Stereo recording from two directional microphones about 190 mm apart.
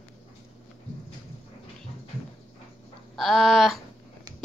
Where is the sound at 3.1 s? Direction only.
Centre (ahead or behind).